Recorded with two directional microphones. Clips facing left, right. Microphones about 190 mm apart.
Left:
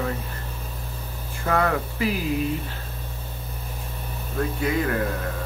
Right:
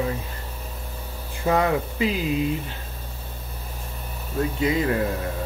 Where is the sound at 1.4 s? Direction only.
20° right (ahead or behind).